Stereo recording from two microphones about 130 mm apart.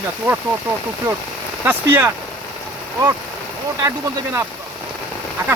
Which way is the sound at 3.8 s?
20° right (ahead or behind).